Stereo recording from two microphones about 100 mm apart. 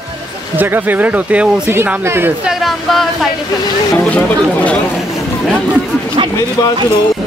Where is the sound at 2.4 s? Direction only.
Centre (ahead or behind).